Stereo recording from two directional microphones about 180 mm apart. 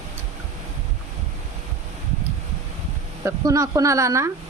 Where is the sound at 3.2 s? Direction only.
20° right (ahead or behind).